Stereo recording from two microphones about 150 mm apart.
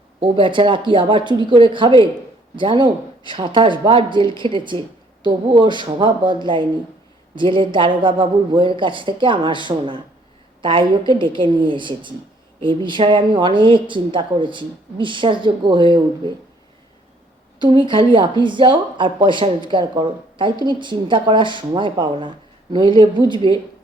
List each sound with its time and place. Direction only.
0.2 s a woman's voice: 35° right (ahead or behind)
17.6 s a woman's voice: 30° right (ahead or behind)